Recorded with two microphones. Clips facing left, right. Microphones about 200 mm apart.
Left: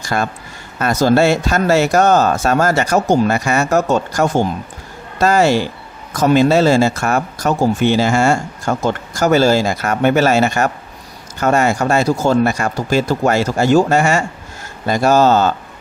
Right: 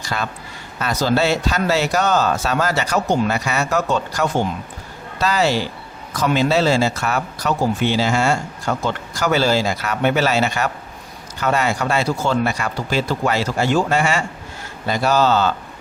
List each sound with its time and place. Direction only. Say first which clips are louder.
0.0 s speech: left 6 dB; 50° left (ahead or behind)